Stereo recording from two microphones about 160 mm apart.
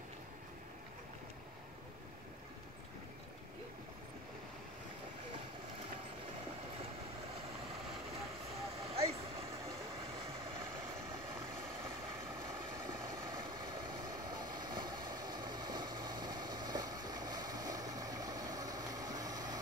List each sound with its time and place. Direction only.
8.9 s vehicle: 40° right (ahead or behind)
13.1 s vehicle: 25° right (ahead or behind)